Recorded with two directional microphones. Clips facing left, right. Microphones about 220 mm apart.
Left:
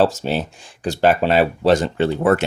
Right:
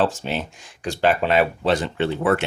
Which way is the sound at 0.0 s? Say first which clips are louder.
Left 5 dB; 40° left (ahead or behind).